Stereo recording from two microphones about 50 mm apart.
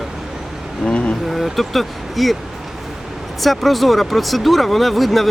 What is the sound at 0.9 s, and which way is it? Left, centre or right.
Vehicle, left.